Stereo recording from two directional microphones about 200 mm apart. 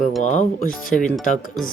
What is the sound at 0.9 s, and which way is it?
Speech, 5° left (ahead or behind).